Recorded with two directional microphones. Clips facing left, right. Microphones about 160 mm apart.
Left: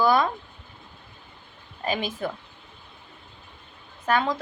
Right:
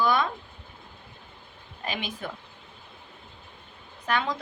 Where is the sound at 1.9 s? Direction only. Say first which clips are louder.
Left 6 dB; 40° left (ahead or behind).